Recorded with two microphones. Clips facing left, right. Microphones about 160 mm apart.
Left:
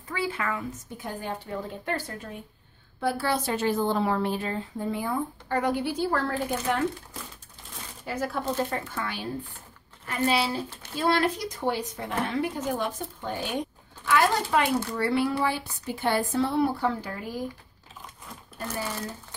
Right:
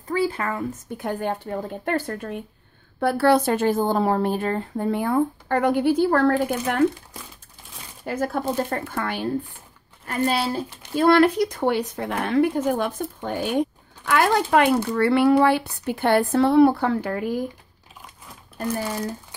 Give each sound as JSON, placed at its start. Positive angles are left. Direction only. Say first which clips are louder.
{"t": 0.1, "sound": "a woman's voice", "louder": "right 6 dB", "side_deg": -40}
{"t": 0.9, "sound": "a woman's voice", "louder": "right 9 dB", "side_deg": -60}
{"t": 8.0, "sound": "speech", "louder": "right 5 dB", "side_deg": -50}
{"t": 10.0, "sound": "speech", "louder": "right 3 dB", "side_deg": -45}
{"t": 11.0, "sound": "a woman's voice", "louder": "right 9 dB", "side_deg": -60}